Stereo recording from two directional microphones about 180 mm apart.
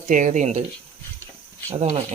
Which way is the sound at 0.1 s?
45° right (ahead or behind).